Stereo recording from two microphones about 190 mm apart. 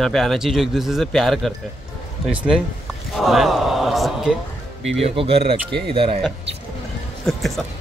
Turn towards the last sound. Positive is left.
turn(degrees=0)  # may be behind; listen again after turning